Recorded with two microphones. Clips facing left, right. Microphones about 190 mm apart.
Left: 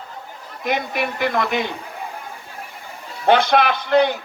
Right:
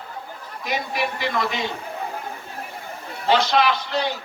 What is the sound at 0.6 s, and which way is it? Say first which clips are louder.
A man's voice: left 3 dB; 55° left (ahead or behind).